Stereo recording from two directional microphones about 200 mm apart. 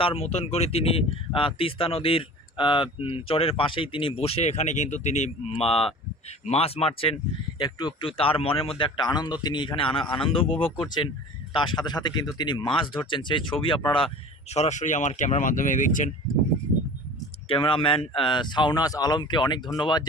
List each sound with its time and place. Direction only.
0.0 s speech: 30° left (ahead or behind)
17.5 s speech: 25° left (ahead or behind)